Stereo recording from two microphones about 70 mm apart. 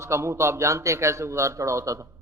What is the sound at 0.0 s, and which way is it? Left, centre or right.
A man's voice, right.